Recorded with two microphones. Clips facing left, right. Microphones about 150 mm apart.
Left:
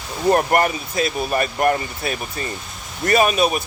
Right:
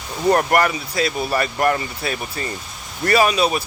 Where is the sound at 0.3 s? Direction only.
25° left (ahead or behind).